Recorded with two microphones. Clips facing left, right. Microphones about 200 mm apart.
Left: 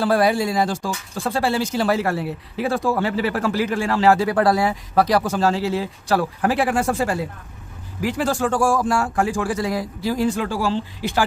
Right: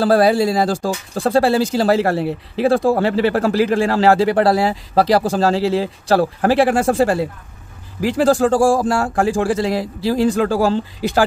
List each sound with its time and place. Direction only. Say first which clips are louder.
0.0 s speech: right 5 dB; 35° right (ahead or behind)